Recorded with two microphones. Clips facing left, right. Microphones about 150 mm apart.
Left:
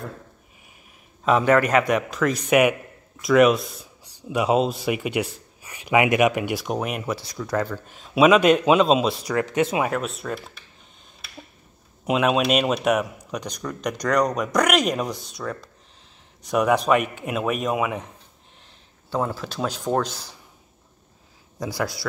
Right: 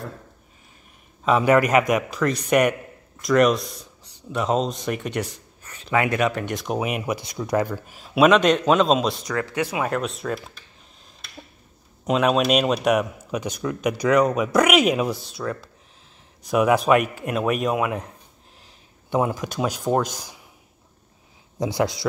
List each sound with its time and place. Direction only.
1.4 s speech: 10° right (ahead or behind)
9.3 s speech: 20° left (ahead or behind)
9.8 s speech: centre (ahead or behind)
12.0 s speech: centre (ahead or behind)
19.0 s speech: 15° right (ahead or behind)
21.5 s a man's voice: 20° right (ahead or behind)